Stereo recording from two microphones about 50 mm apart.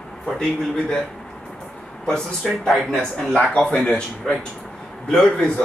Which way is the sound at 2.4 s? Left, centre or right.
Centre.